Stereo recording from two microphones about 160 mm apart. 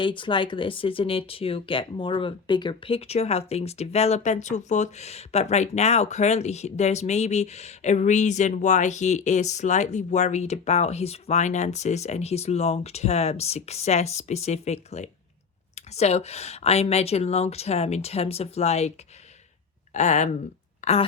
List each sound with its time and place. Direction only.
0.0 s speech: 30° left (ahead or behind)